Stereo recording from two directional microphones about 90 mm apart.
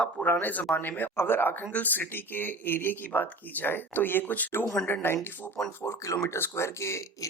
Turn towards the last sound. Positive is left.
turn(degrees=30)  # may be behind; listen again after turning